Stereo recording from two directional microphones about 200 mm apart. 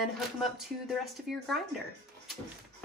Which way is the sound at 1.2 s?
Centre (ahead or behind).